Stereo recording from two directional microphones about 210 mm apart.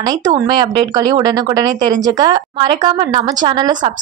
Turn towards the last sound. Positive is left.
turn(degrees=-20)  # may be behind; listen again after turning